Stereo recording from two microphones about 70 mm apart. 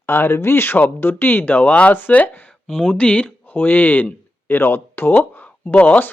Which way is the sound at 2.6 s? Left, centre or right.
Centre.